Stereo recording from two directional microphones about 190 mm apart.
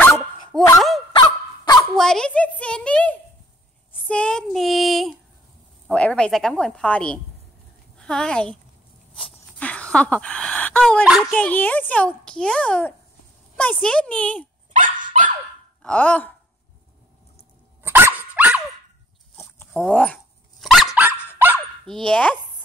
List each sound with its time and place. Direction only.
0.7 s a woman's voice: centre (ahead or behind)
1.1 s fowl: 20° left (ahead or behind)
2.0 s a woman's voice: 5° left (ahead or behind)
11.3 s a child's voice: 10° left (ahead or behind)
15.8 s a child's voice: 5° left (ahead or behind)
17.8 s dog: 10° right (ahead or behind)
19.3 s a sound: 10° left (ahead or behind)
19.8 s a woman's voice: 5° left (ahead or behind)
20.6 s dog: centre (ahead or behind)
21.8 s a woman's voice: 5° left (ahead or behind)